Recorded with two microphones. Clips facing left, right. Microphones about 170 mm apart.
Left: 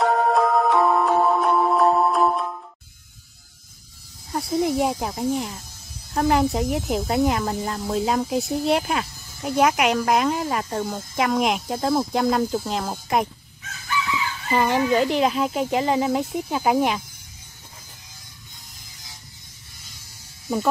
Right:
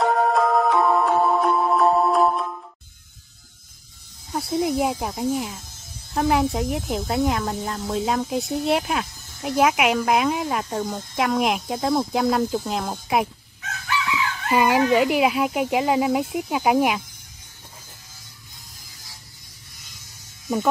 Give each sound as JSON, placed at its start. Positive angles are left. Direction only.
{"t": 0.0, "sound": "music", "side_deg": 0}
{"t": 4.3, "sound": "speech", "side_deg": 0}
{"t": 13.6, "sound": "chicken", "side_deg": -70}
{"t": 14.5, "sound": "speech", "side_deg": -10}